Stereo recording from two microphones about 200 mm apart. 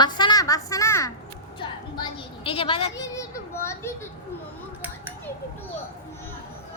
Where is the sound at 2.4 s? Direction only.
25° left (ahead or behind).